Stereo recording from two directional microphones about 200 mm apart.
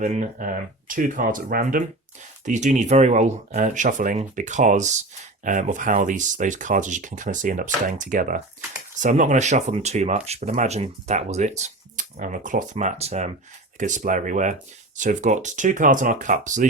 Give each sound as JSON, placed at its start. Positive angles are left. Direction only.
{"t": 0.0, "sound": "speech", "side_deg": -35}